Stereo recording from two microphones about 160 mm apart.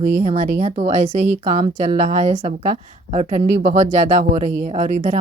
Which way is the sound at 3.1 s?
40° right (ahead or behind).